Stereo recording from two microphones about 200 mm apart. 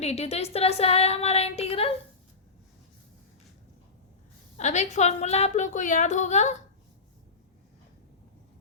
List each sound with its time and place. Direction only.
0.0 s a woman's voice: 30° left (ahead or behind)
4.5 s a woman's voice: 35° left (ahead or behind)